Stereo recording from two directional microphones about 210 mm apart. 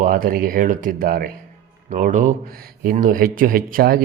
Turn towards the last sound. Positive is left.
turn(degrees=-45)  # may be behind; listen again after turning